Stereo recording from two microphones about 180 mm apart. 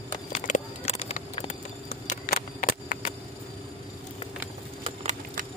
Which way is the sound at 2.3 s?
50° left (ahead or behind).